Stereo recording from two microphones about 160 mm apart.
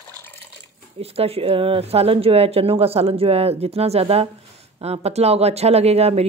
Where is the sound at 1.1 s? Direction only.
40° right (ahead or behind).